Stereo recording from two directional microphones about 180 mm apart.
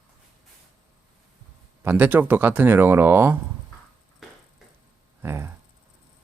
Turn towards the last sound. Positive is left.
turn(degrees=-15)  # may be behind; listen again after turning